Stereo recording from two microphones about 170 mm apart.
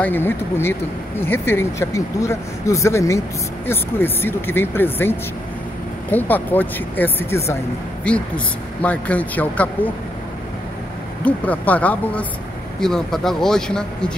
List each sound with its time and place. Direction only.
0.0 s speech: 10° left (ahead or behind)
6.1 s speech: 10° left (ahead or behind)
11.2 s speech: 10° left (ahead or behind)